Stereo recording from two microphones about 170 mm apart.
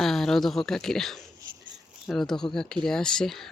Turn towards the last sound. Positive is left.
turn(degrees=5)  # may be behind; listen again after turning